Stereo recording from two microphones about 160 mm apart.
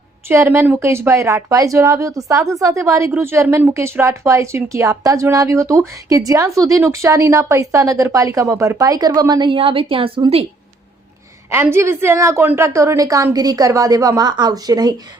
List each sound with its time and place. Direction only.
0.3 s speech: 15° right (ahead or behind); by 10.4 s 35° right (ahead or behind)
11.5 s speech: 15° right (ahead or behind)